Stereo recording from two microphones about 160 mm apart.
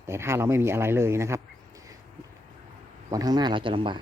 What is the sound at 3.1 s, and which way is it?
Speech, 25° right (ahead or behind).